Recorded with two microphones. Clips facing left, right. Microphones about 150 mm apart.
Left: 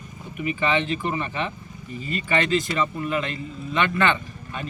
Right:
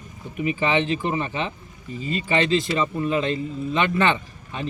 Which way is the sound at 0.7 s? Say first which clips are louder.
Right 2 dB; 25° right (ahead or behind).